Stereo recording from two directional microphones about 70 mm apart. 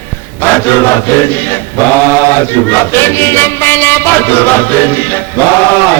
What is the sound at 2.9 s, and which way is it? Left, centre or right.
Music, left.